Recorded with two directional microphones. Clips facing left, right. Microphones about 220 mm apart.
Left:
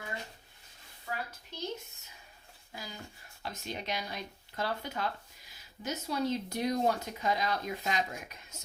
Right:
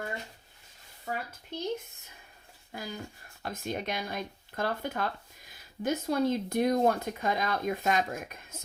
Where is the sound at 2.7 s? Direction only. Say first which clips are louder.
Right 6 dB; 55° right (ahead or behind).